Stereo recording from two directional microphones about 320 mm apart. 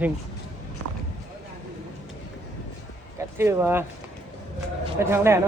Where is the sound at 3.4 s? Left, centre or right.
Centre.